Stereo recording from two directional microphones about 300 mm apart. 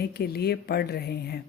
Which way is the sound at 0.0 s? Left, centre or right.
Left.